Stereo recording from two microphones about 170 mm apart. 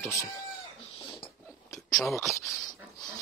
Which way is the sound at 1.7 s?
Centre (ahead or behind).